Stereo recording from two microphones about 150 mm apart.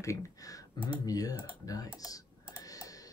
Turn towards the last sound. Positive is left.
turn(degrees=25)  # may be behind; listen again after turning